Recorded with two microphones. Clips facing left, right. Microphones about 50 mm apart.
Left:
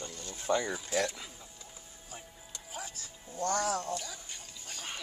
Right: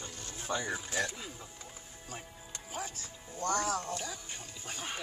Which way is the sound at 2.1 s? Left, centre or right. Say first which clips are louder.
Right 2 dB; right.